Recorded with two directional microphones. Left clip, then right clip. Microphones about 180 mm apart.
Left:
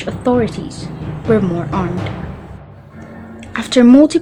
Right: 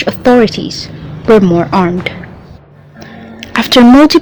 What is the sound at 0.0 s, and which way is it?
Speech, 35° right (ahead or behind).